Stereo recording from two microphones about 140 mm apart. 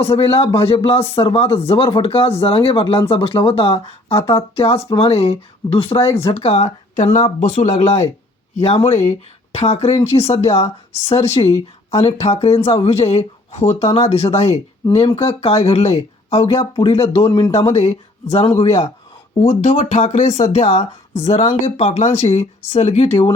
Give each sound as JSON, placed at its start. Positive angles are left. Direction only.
{"t": 0.2, "sound": "speech", "side_deg": 45}
{"t": 17.7, "sound": "speech", "side_deg": 50}